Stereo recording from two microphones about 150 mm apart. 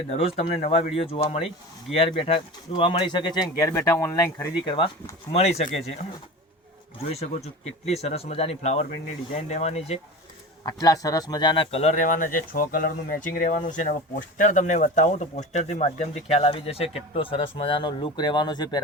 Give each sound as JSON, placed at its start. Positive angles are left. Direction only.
{"t": 0.1, "sound": "speech", "side_deg": 40}
{"t": 3.7, "sound": "speech", "side_deg": 15}
{"t": 5.3, "sound": "speech", "side_deg": 45}
{"t": 7.1, "sound": "speech", "side_deg": 45}
{"t": 10.7, "sound": "speech", "side_deg": 25}